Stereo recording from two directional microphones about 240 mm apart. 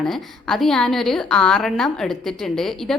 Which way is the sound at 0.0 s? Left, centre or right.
Centre.